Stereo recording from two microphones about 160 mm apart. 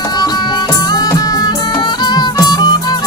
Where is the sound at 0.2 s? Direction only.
25° left (ahead or behind).